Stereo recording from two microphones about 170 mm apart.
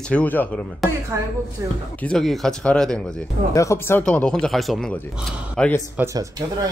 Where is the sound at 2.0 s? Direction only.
5° left (ahead or behind).